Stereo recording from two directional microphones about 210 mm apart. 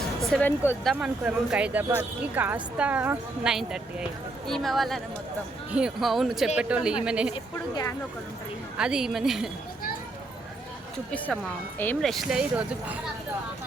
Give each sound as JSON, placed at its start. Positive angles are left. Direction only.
{"t": 0.3, "sound": "speech", "side_deg": 5}
{"t": 0.9, "sound": "speech", "side_deg": -5}
{"t": 7.5, "sound": "speech", "side_deg": 15}
{"t": 8.8, "sound": "speech", "side_deg": -5}
{"t": 11.8, "sound": "speech", "side_deg": 5}